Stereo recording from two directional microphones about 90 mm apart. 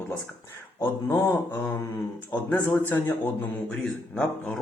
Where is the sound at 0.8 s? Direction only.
30° left (ahead or behind).